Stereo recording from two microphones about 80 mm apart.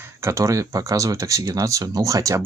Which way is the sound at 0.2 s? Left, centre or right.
Right.